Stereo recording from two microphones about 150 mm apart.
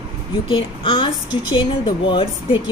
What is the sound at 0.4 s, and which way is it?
Speech, 35° left (ahead or behind).